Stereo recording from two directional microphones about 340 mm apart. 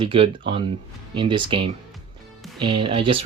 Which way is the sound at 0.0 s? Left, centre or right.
Centre.